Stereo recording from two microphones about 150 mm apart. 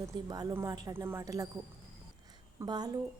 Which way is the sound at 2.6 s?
25° right (ahead or behind).